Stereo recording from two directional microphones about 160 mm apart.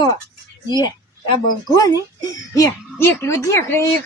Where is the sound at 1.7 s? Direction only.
20° left (ahead or behind).